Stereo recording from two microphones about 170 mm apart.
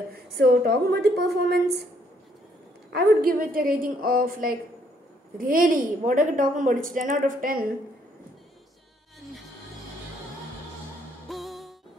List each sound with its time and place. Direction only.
0.4 s a woman's voice: 70° right (ahead or behind)
2.9 s a woman's voice: 65° right (ahead or behind)
11.2 s music: centre (ahead or behind)